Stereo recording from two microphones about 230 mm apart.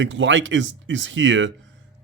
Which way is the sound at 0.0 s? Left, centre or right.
Right.